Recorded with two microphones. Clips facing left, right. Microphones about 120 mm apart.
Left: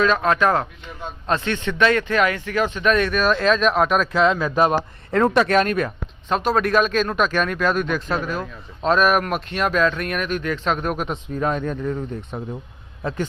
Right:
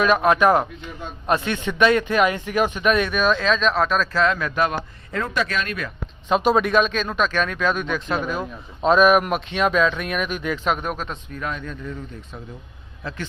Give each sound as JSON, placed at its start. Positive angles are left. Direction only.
{"t": 0.0, "sound": "speech", "side_deg": -15}
{"t": 3.0, "sound": "speech", "side_deg": 0}
{"t": 5.3, "sound": "speech", "side_deg": 55}
{"t": 6.2, "sound": "speech", "side_deg": -10}
{"t": 10.9, "sound": "speech", "side_deg": 15}
{"t": 11.3, "sound": "a man's voice", "side_deg": 40}